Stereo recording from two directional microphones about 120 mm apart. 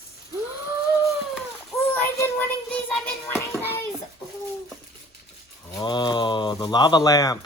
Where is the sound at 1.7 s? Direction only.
20° left (ahead or behind).